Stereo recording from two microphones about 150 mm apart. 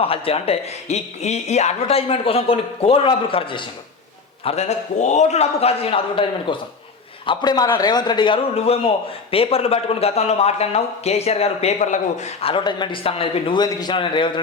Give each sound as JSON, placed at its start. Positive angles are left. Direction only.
{"t": 0.0, "sound": "speech", "side_deg": 40}
{"t": 4.4, "sound": "a man's voice", "side_deg": 45}